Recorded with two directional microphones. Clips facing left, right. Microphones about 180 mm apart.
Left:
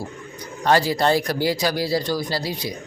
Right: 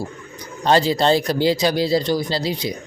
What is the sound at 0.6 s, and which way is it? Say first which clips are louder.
Speech: right 2 dB; 25° right (ahead or behind).